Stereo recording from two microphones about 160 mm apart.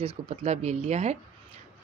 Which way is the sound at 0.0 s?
40° right (ahead or behind).